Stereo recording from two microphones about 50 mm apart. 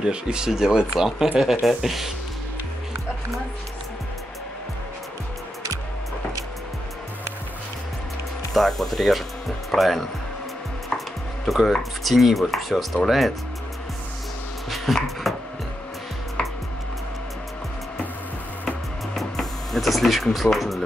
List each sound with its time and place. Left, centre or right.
0.0 s speech: centre
8.5 s speech: centre
10.9 s chopping: left
11.4 s speech: centre
14.9 s speech: centre
15.3 s music: centre
19.1 s music: centre
20.4 s speech: centre